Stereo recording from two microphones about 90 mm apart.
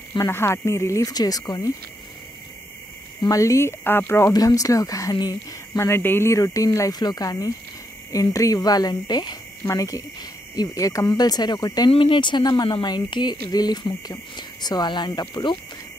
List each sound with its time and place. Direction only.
0.3 s cricket: 30° left (ahead or behind); by 1.4 s 45° left (ahead or behind)
3.2 s speech: 40° left (ahead or behind)
4.3 s cricket: 40° left (ahead or behind)
5.8 s cricket: 30° left (ahead or behind)
7.0 s cricket: 45° left (ahead or behind)
11.9 s speech: 75° left (ahead or behind)
12.4 s cricket: 50° left (ahead or behind)